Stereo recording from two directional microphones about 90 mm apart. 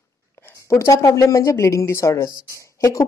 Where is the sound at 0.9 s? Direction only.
35° left (ahead or behind).